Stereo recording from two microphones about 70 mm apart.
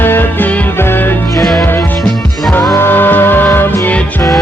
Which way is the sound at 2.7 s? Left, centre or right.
Left.